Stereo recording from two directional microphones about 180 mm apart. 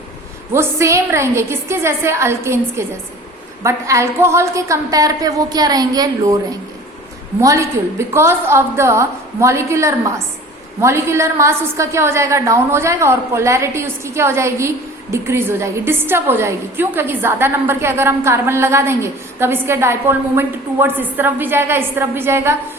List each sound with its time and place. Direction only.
0.5 s a woman's voice: 15° right (ahead or behind)
7.4 s a woman's voice: 15° right (ahead or behind)